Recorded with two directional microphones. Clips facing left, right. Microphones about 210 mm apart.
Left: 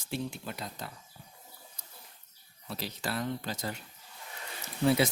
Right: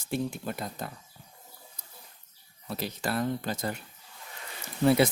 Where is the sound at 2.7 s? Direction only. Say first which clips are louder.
Right 4 dB; 50° right (ahead or behind).